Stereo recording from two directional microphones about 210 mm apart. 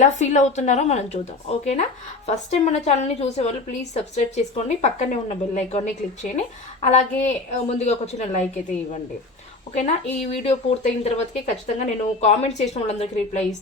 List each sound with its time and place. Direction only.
0.0 s a woman's voice: 35° left (ahead or behind)
9.7 s a woman's voice: 30° left (ahead or behind)